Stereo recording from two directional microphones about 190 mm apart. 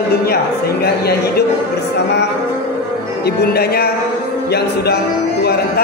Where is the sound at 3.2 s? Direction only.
55° left (ahead or behind).